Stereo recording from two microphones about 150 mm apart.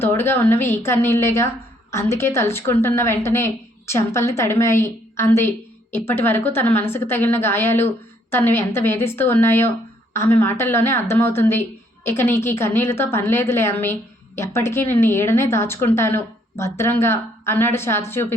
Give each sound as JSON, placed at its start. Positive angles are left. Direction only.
{"t": 0.0, "sound": "a woman's voice", "side_deg": 15}